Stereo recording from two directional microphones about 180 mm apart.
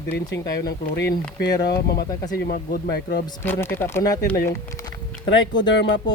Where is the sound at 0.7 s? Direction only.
60° left (ahead or behind).